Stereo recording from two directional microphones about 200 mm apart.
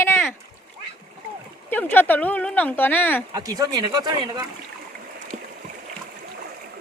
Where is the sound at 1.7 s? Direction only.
10° left (ahead or behind).